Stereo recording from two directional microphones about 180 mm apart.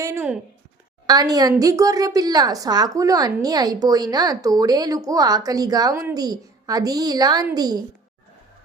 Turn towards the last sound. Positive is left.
turn(degrees=-20)  # may be behind; listen again after turning